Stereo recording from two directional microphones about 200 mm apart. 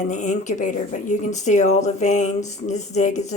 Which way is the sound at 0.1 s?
35° left (ahead or behind).